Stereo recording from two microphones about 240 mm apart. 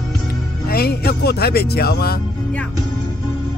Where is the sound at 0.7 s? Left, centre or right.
Left.